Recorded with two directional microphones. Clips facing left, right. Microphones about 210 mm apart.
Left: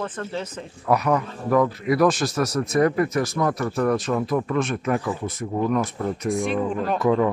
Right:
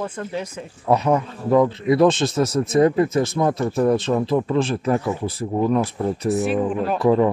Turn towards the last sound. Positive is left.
turn(degrees=-35)  # may be behind; listen again after turning